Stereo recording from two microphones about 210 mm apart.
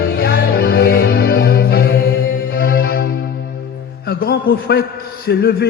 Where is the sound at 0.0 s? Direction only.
45° left (ahead or behind).